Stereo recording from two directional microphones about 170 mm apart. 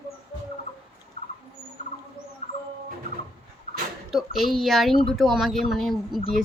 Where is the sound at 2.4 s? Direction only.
40° left (ahead or behind).